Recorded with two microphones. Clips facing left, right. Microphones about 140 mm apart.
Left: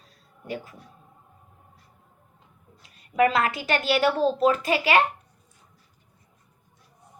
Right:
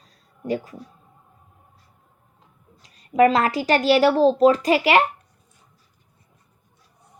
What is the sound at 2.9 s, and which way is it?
A woman's voice, 35° right (ahead or behind).